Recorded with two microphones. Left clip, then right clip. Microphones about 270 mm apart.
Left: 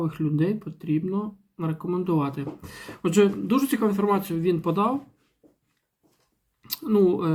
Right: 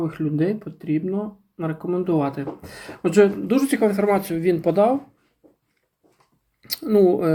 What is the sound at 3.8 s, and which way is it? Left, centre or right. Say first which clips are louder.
Speech: right 4 dB; right.